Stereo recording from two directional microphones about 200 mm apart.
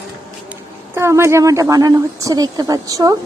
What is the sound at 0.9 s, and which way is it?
A woman's voice, 15° right (ahead or behind).